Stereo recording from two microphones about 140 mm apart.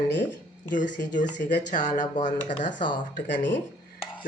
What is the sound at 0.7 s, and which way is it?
Speech, 65° left (ahead or behind).